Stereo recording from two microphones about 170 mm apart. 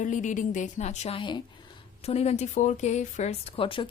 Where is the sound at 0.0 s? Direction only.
45° left (ahead or behind).